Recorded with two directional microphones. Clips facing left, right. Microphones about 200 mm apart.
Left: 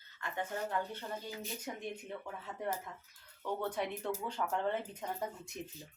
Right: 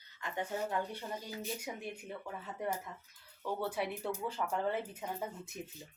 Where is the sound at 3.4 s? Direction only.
5° right (ahead or behind).